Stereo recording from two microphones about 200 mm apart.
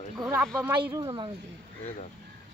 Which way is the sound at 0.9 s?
20° right (ahead or behind).